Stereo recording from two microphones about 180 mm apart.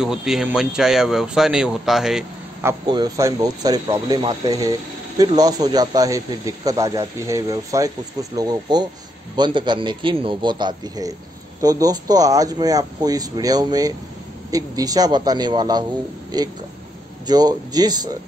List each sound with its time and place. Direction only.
0.0 s a man's voice: centre (ahead or behind)
2.9 s speech: 20° right (ahead or behind)